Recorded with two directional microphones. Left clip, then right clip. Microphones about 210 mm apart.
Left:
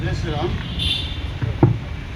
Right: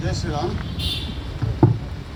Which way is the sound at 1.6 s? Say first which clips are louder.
Even; 10° left (ahead or behind).